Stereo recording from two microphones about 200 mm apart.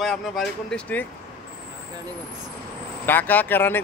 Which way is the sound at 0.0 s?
5° left (ahead or behind).